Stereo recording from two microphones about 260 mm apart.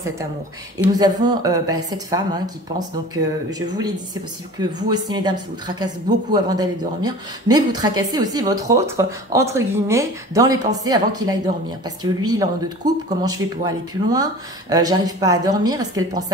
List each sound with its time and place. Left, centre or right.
0.7 s a woman's voice: centre